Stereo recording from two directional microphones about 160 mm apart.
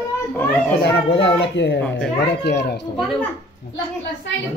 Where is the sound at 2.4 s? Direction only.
90° left.